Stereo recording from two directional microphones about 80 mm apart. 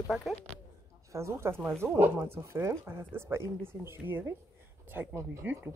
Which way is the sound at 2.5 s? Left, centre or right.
Right.